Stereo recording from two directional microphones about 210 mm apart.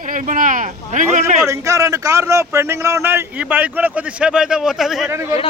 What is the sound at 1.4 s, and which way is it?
Speech, 15° right (ahead or behind).